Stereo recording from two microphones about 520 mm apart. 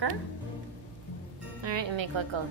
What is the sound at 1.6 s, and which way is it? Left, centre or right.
Speech, right.